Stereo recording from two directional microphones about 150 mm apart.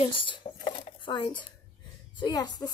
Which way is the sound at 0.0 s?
35° left (ahead or behind).